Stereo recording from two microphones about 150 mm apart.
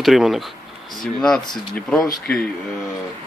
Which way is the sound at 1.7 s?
5° left (ahead or behind).